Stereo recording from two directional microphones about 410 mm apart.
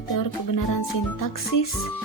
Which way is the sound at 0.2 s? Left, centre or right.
Left.